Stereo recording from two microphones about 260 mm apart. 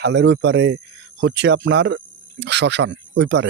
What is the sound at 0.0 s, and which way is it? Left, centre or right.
Speech, right.